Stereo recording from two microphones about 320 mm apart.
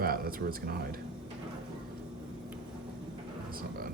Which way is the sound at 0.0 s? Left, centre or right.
Right.